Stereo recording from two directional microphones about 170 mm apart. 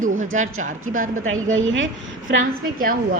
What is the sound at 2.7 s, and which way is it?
Speech, 55° right (ahead or behind).